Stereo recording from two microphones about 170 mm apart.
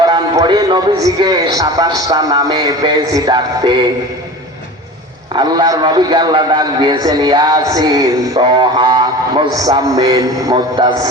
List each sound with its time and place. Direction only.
0.0 s a man's voice: 25° right (ahead or behind)
5.3 s a man's voice: 25° right (ahead or behind)